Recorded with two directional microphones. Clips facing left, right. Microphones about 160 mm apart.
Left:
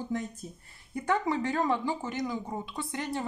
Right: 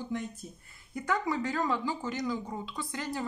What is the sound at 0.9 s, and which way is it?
Speech, 25° left (ahead or behind).